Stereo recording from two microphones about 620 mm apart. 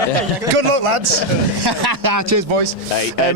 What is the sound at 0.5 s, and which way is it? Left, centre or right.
Speech, right.